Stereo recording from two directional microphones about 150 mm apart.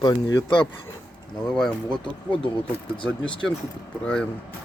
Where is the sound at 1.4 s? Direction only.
5° left (ahead or behind).